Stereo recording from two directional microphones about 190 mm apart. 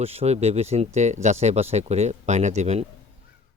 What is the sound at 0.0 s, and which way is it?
Speech, 30° right (ahead or behind).